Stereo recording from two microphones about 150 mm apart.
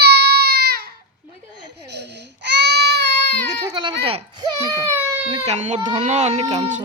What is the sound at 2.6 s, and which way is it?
Baby cry, 90° right.